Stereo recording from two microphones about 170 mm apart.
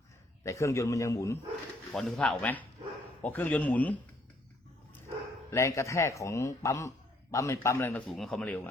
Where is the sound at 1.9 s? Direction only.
5° left (ahead or behind).